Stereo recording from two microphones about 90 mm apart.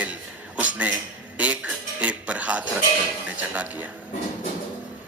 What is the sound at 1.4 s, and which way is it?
Music, 15° right (ahead or behind).